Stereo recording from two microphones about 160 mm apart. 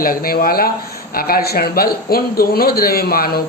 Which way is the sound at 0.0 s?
65° left (ahead or behind).